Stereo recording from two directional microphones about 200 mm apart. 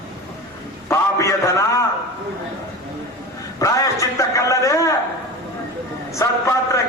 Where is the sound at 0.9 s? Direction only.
15° left (ahead or behind).